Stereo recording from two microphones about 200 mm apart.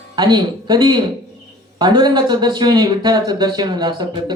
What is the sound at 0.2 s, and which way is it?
A man's voice, 20° right (ahead or behind).